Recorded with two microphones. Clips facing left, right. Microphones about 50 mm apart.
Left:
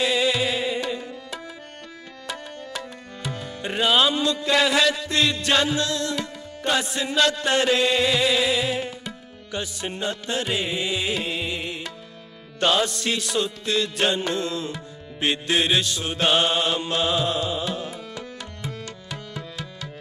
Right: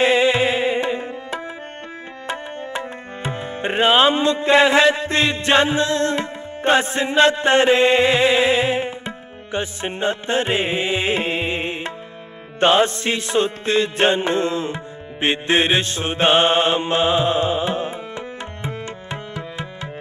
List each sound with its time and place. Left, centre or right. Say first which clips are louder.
0.0 s music: right 6 dB; right
2.2 s tabla: right 6 dB; right
12.5 s music: right 6 dB; right